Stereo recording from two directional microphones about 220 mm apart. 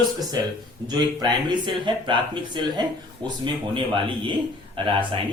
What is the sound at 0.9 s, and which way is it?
A man's voice, 20° right (ahead or behind).